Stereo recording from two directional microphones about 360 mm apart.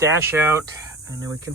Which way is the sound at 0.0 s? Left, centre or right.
Centre.